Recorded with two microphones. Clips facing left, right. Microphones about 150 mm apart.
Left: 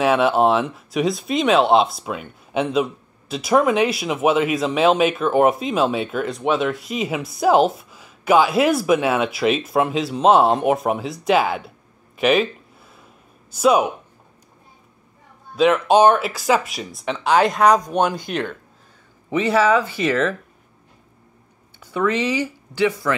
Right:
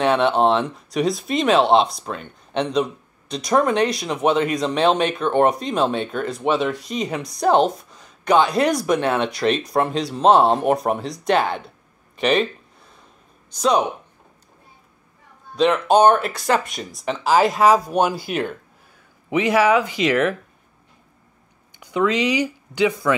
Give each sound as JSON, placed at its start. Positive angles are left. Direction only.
{"t": 0.0, "sound": "speech", "side_deg": 5}
{"t": 12.9, "sound": "a sound", "side_deg": 5}
{"t": 15.5, "sound": "speech", "side_deg": 0}
{"t": 21.7, "sound": "speech", "side_deg": -15}